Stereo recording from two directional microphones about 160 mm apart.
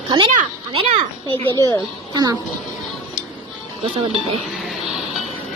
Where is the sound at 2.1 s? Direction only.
25° right (ahead or behind).